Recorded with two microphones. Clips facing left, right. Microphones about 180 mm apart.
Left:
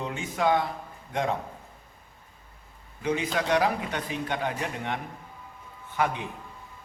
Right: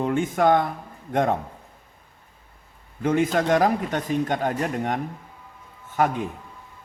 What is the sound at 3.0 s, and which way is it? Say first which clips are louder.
Speech: right 7 dB; 50° right (ahead or behind).